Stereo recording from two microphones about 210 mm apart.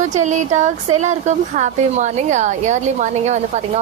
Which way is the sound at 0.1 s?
35° right (ahead or behind).